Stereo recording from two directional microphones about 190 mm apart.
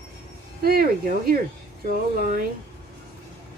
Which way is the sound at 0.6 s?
50° right (ahead or behind).